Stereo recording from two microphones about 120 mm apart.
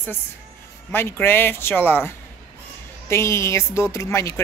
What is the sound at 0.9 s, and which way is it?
Speech, 20° left (ahead or behind).